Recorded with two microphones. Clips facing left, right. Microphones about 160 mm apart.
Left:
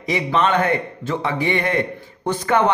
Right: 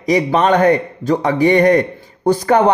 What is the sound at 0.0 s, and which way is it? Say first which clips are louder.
A man's voice: right 5 dB; 40° right (ahead or behind).